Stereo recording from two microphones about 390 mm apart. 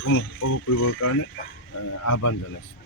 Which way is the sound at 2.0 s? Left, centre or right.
Left.